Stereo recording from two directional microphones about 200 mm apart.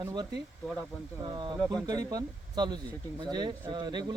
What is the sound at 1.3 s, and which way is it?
Speech, 20° right (ahead or behind).